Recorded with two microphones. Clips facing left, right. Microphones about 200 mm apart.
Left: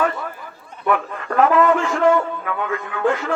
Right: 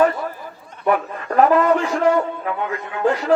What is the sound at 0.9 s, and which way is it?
Speech, 40° right (ahead or behind).